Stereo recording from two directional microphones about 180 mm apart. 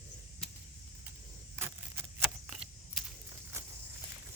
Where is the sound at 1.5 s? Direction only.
15° right (ahead or behind).